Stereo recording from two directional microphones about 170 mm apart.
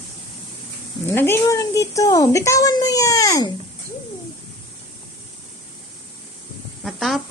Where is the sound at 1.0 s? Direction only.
15° left (ahead or behind).